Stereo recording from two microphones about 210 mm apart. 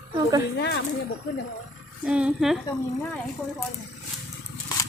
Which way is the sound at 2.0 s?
5° right (ahead or behind).